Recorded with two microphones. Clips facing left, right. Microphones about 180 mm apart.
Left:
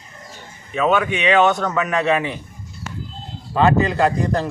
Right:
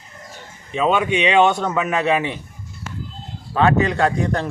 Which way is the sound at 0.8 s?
20° right (ahead or behind).